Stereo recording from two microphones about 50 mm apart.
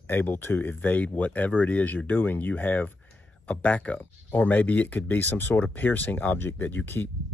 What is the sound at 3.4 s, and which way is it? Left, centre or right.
Speech, left.